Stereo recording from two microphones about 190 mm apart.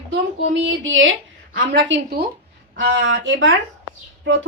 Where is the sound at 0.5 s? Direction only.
80° right.